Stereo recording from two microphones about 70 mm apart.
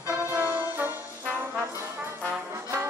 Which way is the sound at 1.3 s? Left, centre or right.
Right.